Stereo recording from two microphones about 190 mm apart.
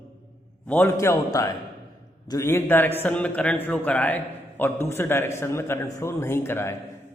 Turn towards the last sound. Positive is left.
turn(degrees=15)  # may be behind; listen again after turning